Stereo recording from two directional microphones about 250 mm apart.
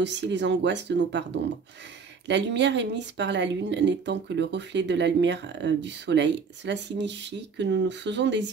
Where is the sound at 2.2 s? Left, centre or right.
Right.